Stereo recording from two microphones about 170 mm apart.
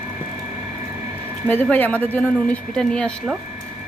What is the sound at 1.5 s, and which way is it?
A woman's voice, 10° left (ahead or behind).